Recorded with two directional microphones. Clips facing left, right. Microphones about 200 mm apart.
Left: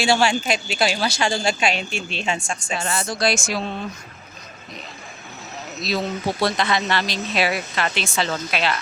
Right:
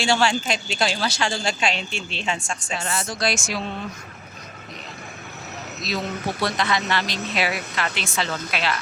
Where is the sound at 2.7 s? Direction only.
30° left (ahead or behind).